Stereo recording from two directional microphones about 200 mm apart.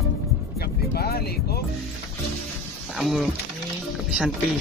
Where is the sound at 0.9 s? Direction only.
50° left (ahead or behind).